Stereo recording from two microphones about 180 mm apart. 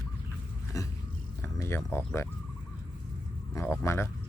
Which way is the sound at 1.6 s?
15° left (ahead or behind).